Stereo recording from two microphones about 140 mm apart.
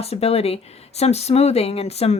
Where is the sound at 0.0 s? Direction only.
45° left (ahead or behind).